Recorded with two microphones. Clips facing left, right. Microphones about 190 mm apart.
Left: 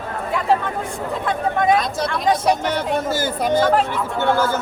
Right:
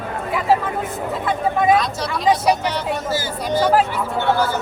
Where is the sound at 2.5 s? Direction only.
50° left (ahead or behind).